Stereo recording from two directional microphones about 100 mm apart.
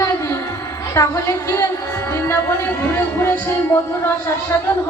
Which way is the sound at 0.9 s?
30° left (ahead or behind).